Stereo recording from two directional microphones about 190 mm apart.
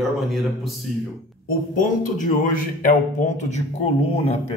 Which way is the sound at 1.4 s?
45° left (ahead or behind).